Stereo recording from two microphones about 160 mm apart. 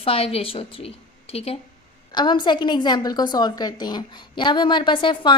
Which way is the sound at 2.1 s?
30° left (ahead or behind).